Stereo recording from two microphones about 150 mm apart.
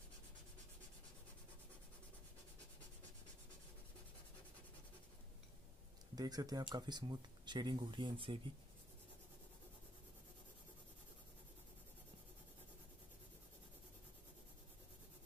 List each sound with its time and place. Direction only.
6.1 s speech: 25° right (ahead or behind)